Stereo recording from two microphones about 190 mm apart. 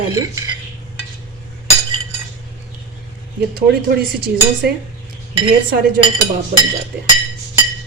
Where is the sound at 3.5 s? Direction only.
55° right (ahead or behind).